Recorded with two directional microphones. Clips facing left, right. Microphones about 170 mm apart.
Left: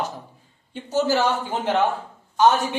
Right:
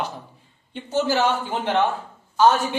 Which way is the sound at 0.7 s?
40° left (ahead or behind).